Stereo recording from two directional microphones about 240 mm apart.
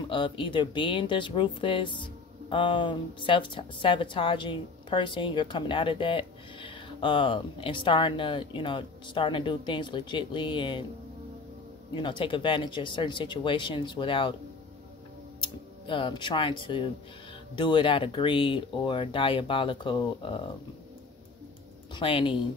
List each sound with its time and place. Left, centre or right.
0.1 s a woman's voice: centre
11.9 s a woman's voice: centre
15.4 s a woman's voice: centre
21.9 s a woman's voice: left